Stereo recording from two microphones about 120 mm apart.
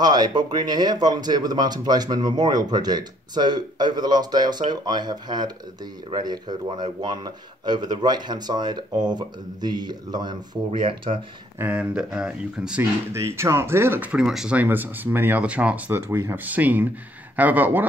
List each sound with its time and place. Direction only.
0.0 s speech: 35° right (ahead or behind)
10.8 s speech: 50° right (ahead or behind)
11.5 s speech: 15° right (ahead or behind)
13.1 s speech: 25° right (ahead or behind)
14.1 s speech: 5° right (ahead or behind)